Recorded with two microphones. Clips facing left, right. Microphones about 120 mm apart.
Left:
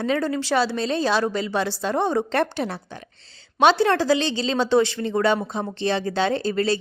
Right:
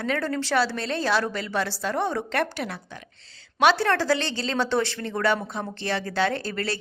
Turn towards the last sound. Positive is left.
turn(degrees=20)  # may be behind; listen again after turning